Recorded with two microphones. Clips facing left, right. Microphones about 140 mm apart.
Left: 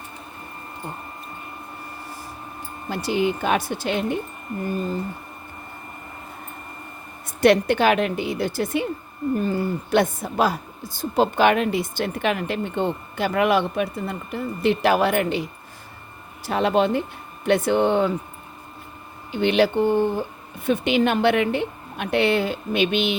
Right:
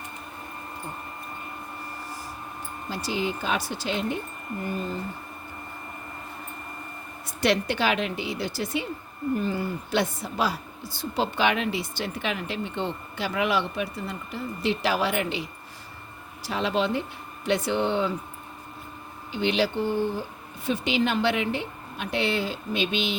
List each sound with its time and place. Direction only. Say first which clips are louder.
2.9 s a woman's voice: left 6 dB; 55° left (ahead or behind)
7.4 s a woman's voice: left 7 dB; 50° left (ahead or behind)
9.9 s a woman's voice: left 7 dB; 50° left (ahead or behind)
19.3 s a woman's voice: left 6 dB; 55° left (ahead or behind)